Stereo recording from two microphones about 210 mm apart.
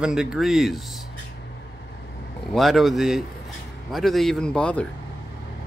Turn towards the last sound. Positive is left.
turn(degrees=5)  # may be behind; listen again after turning